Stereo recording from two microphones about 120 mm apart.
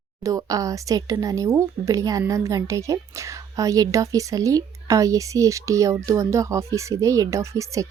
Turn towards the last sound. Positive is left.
turn(degrees=-25)  # may be behind; listen again after turning